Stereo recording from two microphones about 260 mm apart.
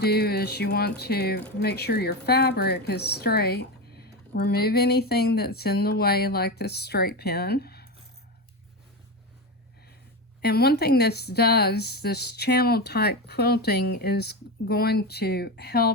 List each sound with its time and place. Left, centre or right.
0.0 s speech: left
10.4 s speech: left